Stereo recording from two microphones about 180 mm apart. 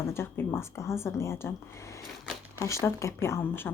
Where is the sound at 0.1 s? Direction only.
15° left (ahead or behind).